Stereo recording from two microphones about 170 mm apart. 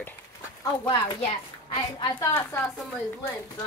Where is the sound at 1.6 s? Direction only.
30° left (ahead or behind).